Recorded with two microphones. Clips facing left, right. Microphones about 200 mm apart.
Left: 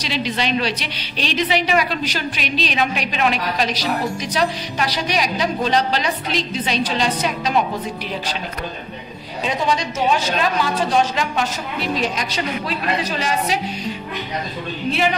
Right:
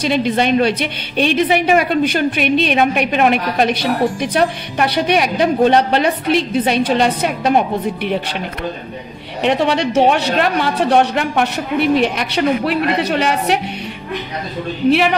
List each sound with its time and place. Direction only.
0.0 s a woman's voice: 55° right (ahead or behind)
9.4 s a woman's voice: 65° right (ahead or behind)
14.9 s speech: 70° right (ahead or behind)